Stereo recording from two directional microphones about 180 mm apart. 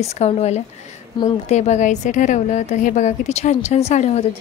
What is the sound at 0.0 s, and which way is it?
A woman's voice, 35° left (ahead or behind).